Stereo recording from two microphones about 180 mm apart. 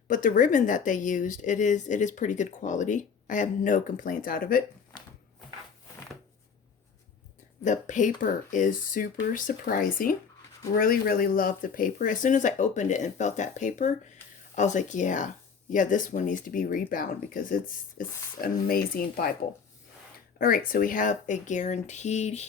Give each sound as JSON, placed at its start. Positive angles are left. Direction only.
{"t": 0.1, "sound": "a woman's voice", "side_deg": 45}
{"t": 7.6, "sound": "a woman's voice", "side_deg": 45}
{"t": 20.4, "sound": "a woman's voice", "side_deg": 50}